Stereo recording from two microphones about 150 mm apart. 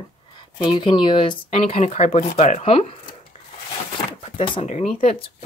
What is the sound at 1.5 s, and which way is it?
Speech, 45° left (ahead or behind).